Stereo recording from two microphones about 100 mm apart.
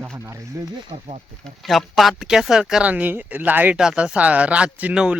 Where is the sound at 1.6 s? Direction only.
Centre (ahead or behind).